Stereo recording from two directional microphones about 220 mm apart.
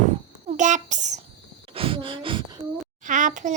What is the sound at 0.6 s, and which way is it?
Child singing, 35° right (ahead or behind).